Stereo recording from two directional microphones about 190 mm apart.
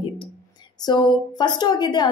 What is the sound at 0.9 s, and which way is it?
A woman's voice, 20° left (ahead or behind).